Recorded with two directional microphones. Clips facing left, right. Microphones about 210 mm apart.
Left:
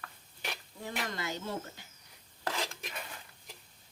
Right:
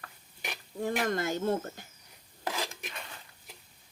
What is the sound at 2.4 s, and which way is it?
Dishes, 5° right (ahead or behind).